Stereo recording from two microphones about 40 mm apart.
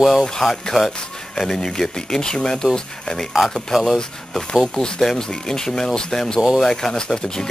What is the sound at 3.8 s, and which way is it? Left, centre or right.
Speech, centre.